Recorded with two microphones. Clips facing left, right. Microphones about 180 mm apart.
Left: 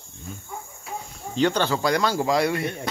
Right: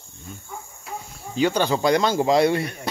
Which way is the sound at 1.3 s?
10° right (ahead or behind).